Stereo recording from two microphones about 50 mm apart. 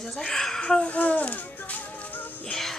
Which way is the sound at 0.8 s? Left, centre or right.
Left.